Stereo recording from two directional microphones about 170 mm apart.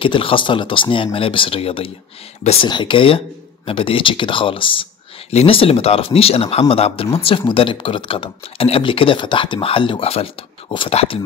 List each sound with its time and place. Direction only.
0.0 s speech: 30° left (ahead or behind)